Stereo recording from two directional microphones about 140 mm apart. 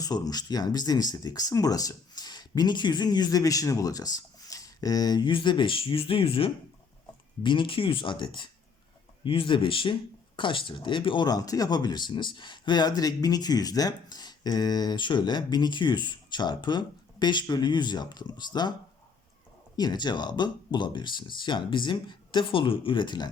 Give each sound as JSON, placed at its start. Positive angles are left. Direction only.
{"t": 0.0, "sound": "speech", "side_deg": 30}
{"t": 19.7, "sound": "speech", "side_deg": 30}